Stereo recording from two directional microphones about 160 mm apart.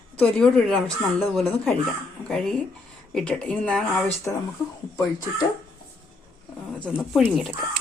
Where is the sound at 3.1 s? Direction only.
5° left (ahead or behind).